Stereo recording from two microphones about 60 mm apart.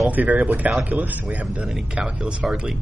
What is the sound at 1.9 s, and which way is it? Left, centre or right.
Speech, centre.